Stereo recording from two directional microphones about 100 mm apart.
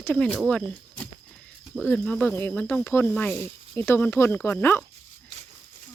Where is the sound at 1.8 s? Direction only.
15° left (ahead or behind).